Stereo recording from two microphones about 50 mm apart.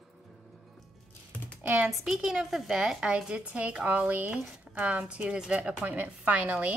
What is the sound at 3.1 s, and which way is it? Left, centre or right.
A woman's voice, right.